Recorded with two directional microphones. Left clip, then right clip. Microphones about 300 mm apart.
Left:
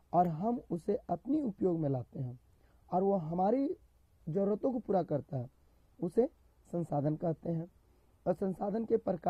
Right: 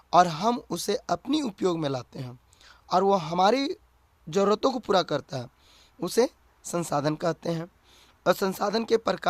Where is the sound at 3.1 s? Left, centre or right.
Right.